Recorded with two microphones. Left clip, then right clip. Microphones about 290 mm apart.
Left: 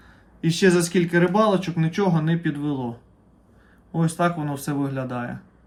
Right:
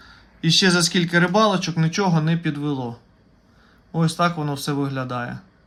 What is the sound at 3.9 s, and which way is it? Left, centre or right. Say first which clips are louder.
Speech: right 2 dB; centre.